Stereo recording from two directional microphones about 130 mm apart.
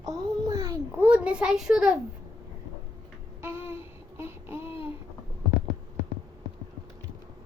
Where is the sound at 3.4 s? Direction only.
15° right (ahead or behind).